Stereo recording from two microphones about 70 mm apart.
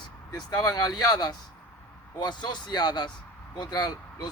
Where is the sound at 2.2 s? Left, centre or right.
Left.